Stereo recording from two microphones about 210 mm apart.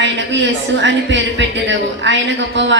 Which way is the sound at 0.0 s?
60° right (ahead or behind).